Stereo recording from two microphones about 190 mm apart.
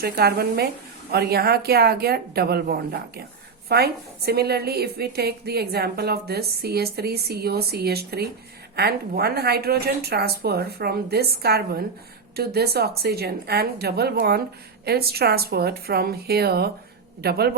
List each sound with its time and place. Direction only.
0.0 s a woman's voice: 55° right (ahead or behind)